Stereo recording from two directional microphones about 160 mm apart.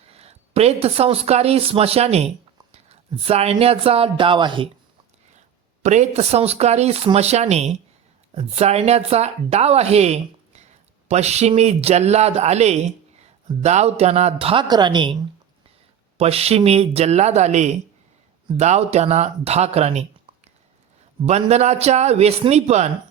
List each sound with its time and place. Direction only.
0.0 s speech: 40° right (ahead or behind)
2.7 s a sound: 40° right (ahead or behind)
3.6 s speech: 40° right (ahead or behind)
5.8 s speech: 45° right (ahead or behind); by 15.1 s 30° right (ahead or behind)
16.1 s speech: 40° right (ahead or behind)
21.2 s speech: 45° right (ahead or behind)